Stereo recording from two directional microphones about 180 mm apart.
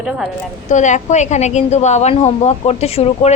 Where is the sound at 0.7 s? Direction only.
40° left (ahead or behind).